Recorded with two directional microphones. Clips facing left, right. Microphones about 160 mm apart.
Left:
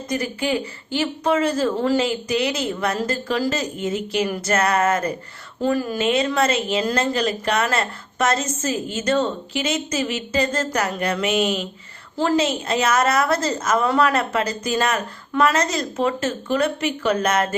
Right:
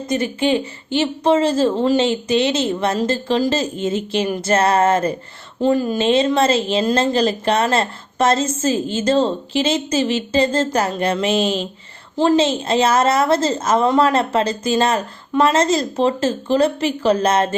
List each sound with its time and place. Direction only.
0.1 s a woman's voice: 25° right (ahead or behind)